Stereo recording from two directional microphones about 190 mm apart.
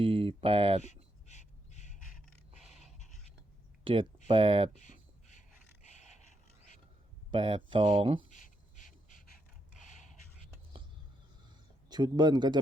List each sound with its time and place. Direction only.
0.0 s speech: 30° right (ahead or behind)
0.8 s crow: 35° left (ahead or behind)
2.1 s pant: centre (ahead or behind)
4.3 s speech: 25° right (ahead or behind)
7.3 s speech: 25° right (ahead or behind)
8.3 s a sound: 40° left (ahead or behind)
11.9 s speech: 20° right (ahead or behind)